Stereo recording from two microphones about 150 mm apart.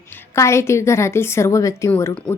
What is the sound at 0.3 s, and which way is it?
Speech, 20° left (ahead or behind).